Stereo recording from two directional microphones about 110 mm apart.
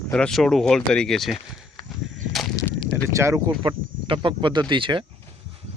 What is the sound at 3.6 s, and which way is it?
Speech, 50° right (ahead or behind).